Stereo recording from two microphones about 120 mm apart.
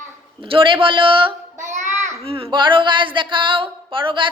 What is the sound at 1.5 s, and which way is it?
Child singing, 90° right.